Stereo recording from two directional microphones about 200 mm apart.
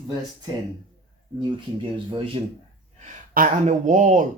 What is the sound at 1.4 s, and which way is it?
Speech, 20° right (ahead or behind).